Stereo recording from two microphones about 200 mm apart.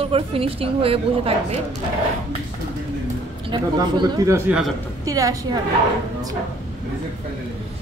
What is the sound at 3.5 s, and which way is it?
Speech, 20° right (ahead or behind).